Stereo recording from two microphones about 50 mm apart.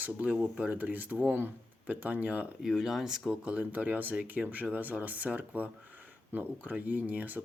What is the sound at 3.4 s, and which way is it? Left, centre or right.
Speech, right.